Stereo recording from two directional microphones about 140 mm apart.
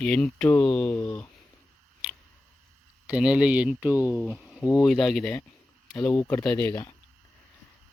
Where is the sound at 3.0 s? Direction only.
10° right (ahead or behind).